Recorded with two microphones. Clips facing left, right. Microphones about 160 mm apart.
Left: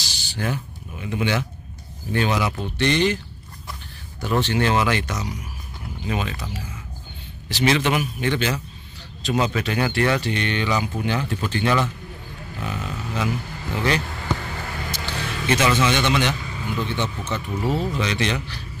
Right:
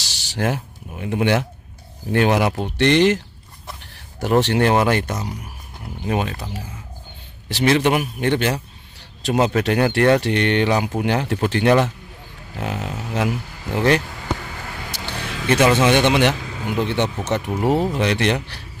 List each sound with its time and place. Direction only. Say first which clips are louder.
0.3 s speech: right 5 dB; 75° right (ahead or behind)
4.2 s speech: right 5 dB; 70° right (ahead or behind); by 6.4 s 55° right (ahead or behind)
7.4 s a man's voice: right 3 dB; 55° right (ahead or behind)
9.5 s speech: right 5 dB; 55° right (ahead or behind)